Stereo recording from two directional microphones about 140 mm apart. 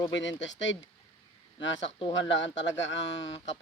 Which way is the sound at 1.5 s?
35° left (ahead or behind).